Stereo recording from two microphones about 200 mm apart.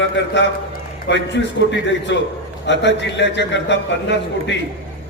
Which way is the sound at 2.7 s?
60° left (ahead or behind).